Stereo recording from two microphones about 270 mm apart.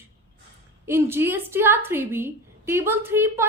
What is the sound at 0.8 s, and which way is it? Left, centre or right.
A woman's voice, centre.